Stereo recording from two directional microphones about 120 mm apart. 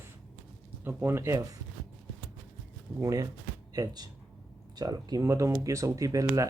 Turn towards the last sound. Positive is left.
turn(degrees=-30)  # may be behind; listen again after turning